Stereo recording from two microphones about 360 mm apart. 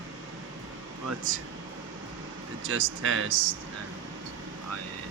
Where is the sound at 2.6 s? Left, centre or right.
Right.